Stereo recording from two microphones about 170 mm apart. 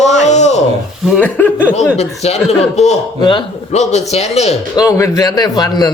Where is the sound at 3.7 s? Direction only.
40° left (ahead or behind).